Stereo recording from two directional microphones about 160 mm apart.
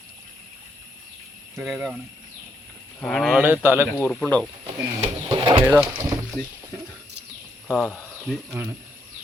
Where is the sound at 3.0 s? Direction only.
Centre (ahead or behind); by 3.8 s 15° right (ahead or behind).